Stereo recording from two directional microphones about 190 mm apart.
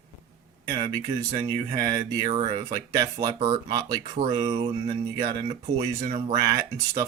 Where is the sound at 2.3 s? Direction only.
30° right (ahead or behind).